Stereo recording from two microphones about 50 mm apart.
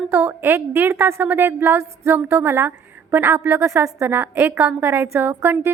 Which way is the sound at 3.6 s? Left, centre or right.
Right.